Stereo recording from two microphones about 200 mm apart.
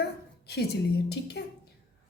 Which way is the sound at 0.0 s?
55° left (ahead or behind).